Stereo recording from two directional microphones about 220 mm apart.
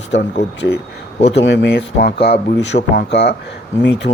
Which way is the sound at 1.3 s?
50° left (ahead or behind).